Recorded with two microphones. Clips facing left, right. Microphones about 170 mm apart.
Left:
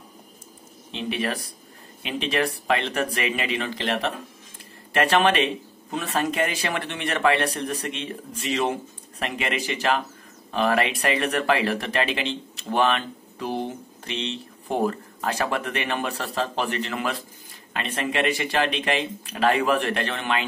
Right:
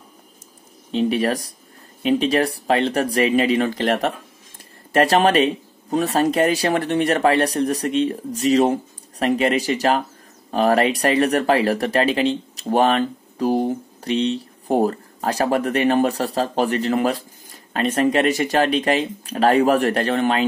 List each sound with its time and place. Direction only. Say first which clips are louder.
0.9 s speech: right 8 dB; 40° right (ahead or behind)